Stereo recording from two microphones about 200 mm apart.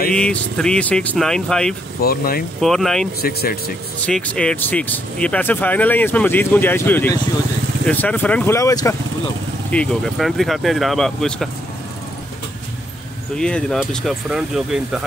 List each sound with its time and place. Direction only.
0.1 s speech: 5° left (ahead or behind)
2.0 s speech: 50° left (ahead or behind)
2.6 s speech: centre (ahead or behind)
3.2 s speech: 50° left (ahead or behind)
4.0 s speech: 5° left (ahead or behind)
9.7 s speech: 5° left (ahead or behind)
13.4 s speech: 5° left (ahead or behind)